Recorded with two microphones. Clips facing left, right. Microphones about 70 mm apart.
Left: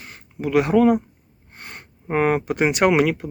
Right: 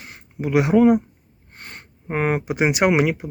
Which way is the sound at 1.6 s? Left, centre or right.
Centre.